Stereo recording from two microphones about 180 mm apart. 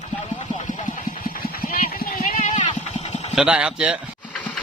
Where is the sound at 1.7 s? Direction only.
55° left (ahead or behind).